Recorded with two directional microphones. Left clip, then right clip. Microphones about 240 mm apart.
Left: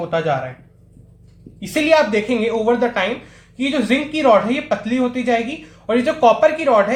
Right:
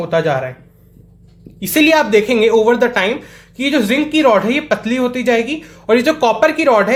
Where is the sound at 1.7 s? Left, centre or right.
Right.